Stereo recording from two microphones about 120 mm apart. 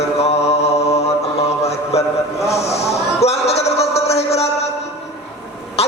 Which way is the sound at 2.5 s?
60° left (ahead or behind).